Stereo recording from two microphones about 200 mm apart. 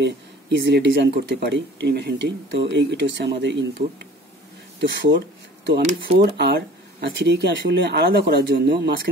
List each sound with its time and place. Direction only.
0.0 s speech: 60° right (ahead or behind)